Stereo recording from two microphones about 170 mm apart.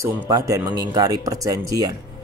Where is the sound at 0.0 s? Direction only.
20° right (ahead or behind).